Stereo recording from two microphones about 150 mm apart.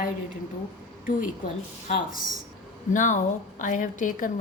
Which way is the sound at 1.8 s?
65° left (ahead or behind).